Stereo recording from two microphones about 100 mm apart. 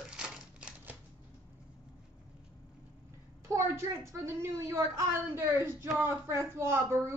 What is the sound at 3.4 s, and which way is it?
A woman's voice, 30° right (ahead or behind).